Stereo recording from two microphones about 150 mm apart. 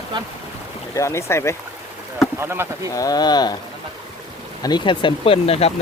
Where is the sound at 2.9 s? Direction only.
25° left (ahead or behind).